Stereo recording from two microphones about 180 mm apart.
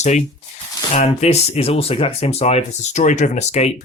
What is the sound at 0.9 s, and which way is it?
Speech, 35° left (ahead or behind).